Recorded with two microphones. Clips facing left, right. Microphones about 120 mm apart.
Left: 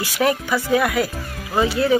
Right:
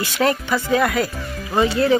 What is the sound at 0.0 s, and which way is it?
Speech, 10° left (ahead or behind).